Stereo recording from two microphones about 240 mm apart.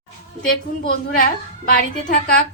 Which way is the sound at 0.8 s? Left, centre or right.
Left.